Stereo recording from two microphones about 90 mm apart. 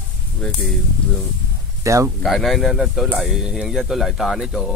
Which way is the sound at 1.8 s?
35° right (ahead or behind).